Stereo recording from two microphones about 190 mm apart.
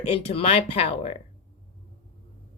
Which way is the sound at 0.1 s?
30° left (ahead or behind).